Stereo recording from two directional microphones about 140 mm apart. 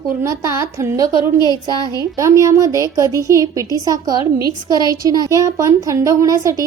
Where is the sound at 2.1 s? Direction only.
20° right (ahead or behind).